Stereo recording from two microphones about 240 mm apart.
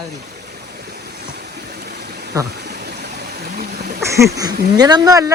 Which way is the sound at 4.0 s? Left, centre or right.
Centre.